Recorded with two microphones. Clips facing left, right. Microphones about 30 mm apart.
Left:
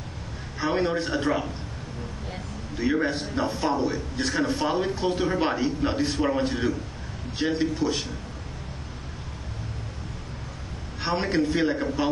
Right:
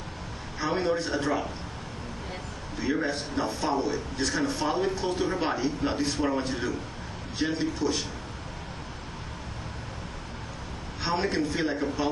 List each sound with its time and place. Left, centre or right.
0.6 s a man's voice: centre
2.8 s a man's voice: centre
7.3 s a man's voice: centre
11.0 s a sound: centre
11.2 s a man's voice: centre